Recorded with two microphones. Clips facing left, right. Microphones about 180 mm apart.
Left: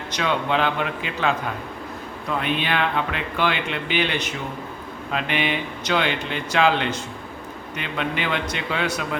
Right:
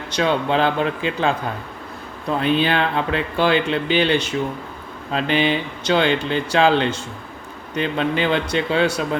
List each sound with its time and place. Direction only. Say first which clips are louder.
0.1 s speech: right 4 dB; 35° right (ahead or behind)
2.4 s speech: right 6 dB; 35° right (ahead or behind)